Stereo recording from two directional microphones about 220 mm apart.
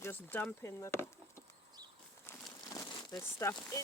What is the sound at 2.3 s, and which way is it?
Crumpling, 10° left (ahead or behind).